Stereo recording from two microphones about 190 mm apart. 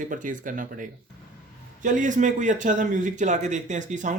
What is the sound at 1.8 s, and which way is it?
Speech, 40° right (ahead or behind).